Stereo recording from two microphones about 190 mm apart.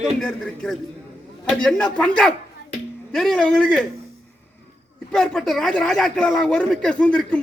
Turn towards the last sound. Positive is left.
turn(degrees=5)  # may be behind; listen again after turning